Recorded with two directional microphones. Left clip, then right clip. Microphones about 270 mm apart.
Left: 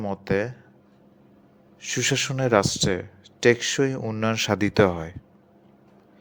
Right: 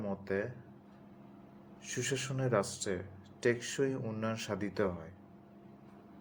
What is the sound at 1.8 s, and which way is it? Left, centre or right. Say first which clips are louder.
Speech: left 13 dB; left.